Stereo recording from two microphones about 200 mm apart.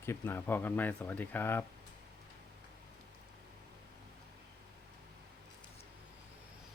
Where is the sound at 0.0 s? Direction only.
10° left (ahead or behind).